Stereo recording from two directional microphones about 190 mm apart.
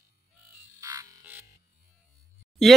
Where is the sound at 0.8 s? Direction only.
15° right (ahead or behind).